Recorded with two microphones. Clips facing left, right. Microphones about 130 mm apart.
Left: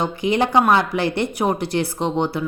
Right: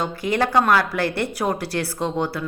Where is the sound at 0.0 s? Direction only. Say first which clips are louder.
Left 2 dB; 20° left (ahead or behind).